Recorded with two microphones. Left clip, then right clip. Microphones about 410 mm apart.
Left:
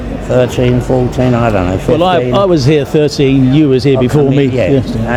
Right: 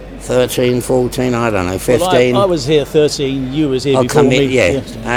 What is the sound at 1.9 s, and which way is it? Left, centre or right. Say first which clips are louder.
Speech: left 1 dB; left.